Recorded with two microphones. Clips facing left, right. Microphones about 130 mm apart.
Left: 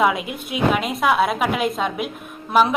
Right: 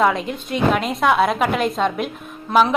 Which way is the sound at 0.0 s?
10° left (ahead or behind).